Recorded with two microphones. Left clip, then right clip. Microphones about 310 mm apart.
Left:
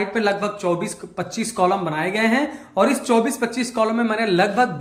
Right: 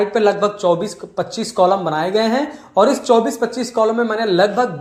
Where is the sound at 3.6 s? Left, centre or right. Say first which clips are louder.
Right 5 dB; centre.